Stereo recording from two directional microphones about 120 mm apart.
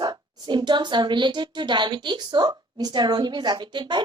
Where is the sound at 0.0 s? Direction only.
35° right (ahead or behind).